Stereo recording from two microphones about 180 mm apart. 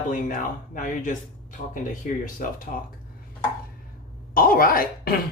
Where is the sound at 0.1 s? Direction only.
50° left (ahead or behind).